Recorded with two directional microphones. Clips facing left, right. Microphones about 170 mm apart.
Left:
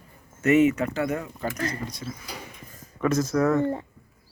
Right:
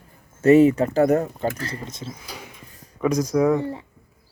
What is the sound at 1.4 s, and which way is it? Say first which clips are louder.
Speech: right 2 dB; 30° right (ahead or behind).